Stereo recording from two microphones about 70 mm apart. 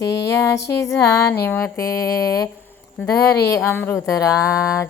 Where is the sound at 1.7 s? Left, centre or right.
Left.